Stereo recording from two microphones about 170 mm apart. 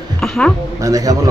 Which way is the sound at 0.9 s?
20° right (ahead or behind).